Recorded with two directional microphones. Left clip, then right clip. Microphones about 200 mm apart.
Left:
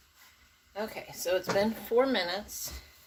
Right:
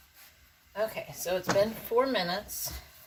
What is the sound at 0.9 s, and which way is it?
Speech, 25° left (ahead or behind).